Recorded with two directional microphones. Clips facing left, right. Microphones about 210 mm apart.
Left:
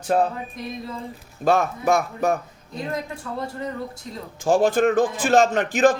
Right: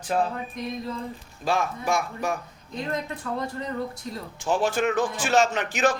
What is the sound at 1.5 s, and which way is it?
Speech, 40° left (ahead or behind).